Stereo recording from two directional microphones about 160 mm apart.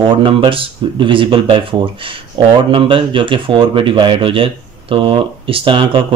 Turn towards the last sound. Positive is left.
turn(degrees=-30)  # may be behind; listen again after turning